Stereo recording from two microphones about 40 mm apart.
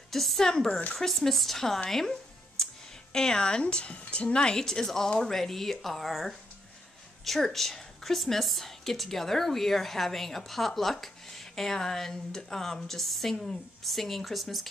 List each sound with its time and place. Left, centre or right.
0.1 s a woman's voice: centre
7.2 s a woman's voice: centre